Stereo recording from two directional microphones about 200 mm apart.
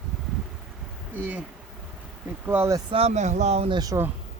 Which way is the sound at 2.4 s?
10° right (ahead or behind).